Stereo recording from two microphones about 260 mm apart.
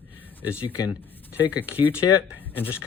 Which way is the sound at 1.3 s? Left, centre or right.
Centre.